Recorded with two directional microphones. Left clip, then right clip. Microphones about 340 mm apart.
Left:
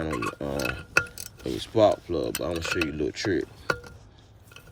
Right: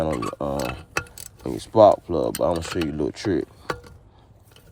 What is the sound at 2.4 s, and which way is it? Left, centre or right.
Speech, right.